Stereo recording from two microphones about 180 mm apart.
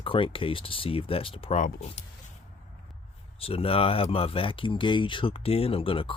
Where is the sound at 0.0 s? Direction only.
30° left (ahead or behind).